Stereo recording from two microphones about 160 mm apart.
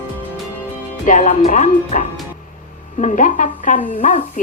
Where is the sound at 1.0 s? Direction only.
55° left (ahead or behind).